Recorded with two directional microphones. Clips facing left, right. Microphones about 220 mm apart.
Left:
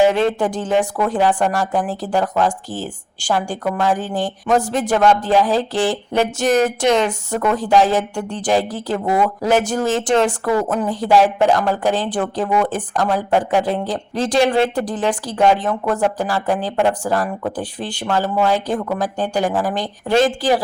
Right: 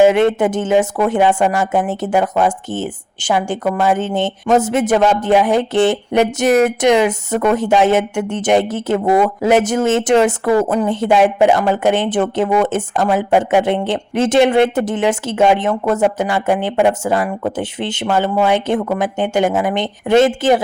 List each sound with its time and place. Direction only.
0.0 s speech: 20° right (ahead or behind)
3.6 s speech: 5° right (ahead or behind)
3.9 s speech: 25° right (ahead or behind)
17.6 s speech: 25° right (ahead or behind)